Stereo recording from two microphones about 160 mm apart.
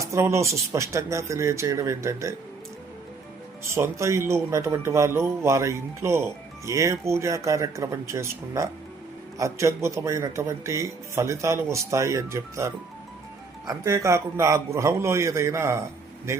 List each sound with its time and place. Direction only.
0.0 s speech: 20° right (ahead or behind)
3.6 s speech: 15° right (ahead or behind)